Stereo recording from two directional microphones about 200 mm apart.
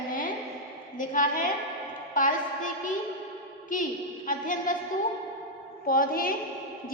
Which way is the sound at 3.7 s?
40° left (ahead or behind).